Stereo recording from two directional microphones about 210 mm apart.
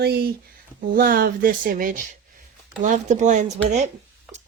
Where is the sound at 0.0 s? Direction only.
50° right (ahead or behind).